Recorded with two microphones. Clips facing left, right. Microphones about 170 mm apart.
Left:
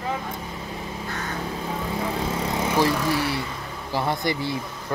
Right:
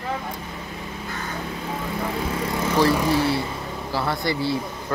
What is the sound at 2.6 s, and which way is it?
Vehicle, 15° left (ahead or behind).